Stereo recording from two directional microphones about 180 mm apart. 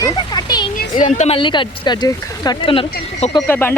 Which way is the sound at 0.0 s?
20° left (ahead or behind).